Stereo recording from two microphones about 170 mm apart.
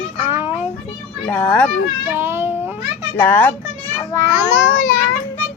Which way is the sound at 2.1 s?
15° right (ahead or behind).